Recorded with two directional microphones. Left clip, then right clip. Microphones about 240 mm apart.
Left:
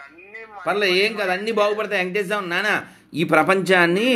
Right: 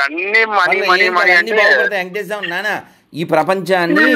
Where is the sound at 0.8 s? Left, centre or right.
Right.